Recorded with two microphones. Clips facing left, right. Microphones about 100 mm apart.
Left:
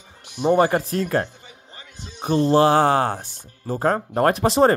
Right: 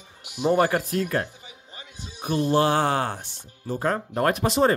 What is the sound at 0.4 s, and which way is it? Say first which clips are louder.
Speech: left 3 dB; 20° left (ahead or behind).